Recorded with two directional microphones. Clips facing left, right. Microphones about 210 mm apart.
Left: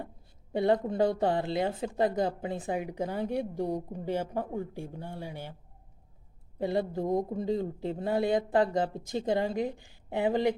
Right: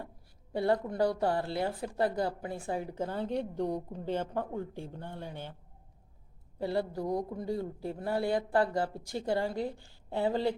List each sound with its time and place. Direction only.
0.5 s speech: 20° left (ahead or behind)
6.6 s speech: 20° left (ahead or behind)